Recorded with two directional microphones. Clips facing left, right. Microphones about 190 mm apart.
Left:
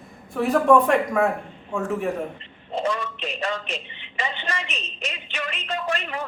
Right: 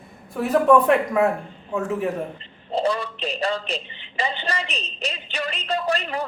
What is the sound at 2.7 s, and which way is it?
A woman's voice, 35° right (ahead or behind).